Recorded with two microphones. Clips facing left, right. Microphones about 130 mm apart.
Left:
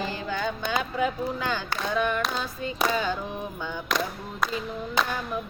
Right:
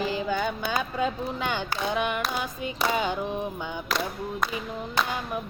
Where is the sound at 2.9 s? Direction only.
15° right (ahead or behind).